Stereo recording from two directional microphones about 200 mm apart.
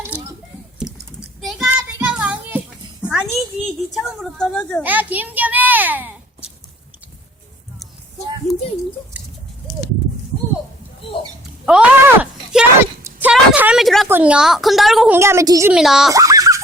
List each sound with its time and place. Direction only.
0.8 s typing: centre (ahead or behind)
1.4 s child singing: centre (ahead or behind)
3.0 s a woman's voice: 5° right (ahead or behind)
4.8 s a child's voice: 10° right (ahead or behind)
11.6 s a sound: 5° right (ahead or behind)
14.1 s a woman's voice: 5° right (ahead or behind)
15.7 s a woman's voice: centre (ahead or behind)
16.1 s dog: 15° right (ahead or behind)